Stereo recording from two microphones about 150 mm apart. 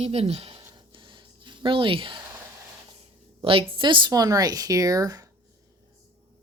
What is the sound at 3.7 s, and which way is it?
Speech, 35° right (ahead or behind).